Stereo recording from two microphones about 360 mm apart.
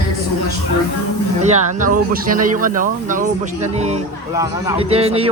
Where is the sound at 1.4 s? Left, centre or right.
Right.